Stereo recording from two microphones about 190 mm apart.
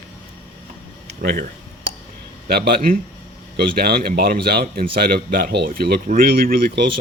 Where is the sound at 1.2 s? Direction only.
55° right (ahead or behind).